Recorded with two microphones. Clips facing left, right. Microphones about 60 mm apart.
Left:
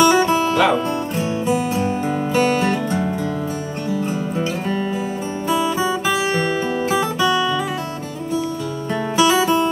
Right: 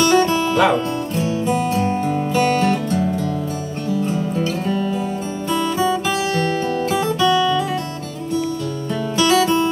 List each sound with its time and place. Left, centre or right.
0.0 s music: centre
2.6 s music: centre
5.5 s guitar: centre
9.1 s music: centre